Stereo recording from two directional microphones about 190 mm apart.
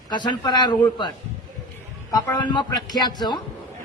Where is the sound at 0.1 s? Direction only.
25° left (ahead or behind).